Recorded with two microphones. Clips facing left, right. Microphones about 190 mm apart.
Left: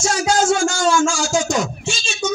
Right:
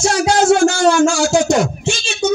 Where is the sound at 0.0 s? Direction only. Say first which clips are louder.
Right 4 dB; 65° right (ahead or behind).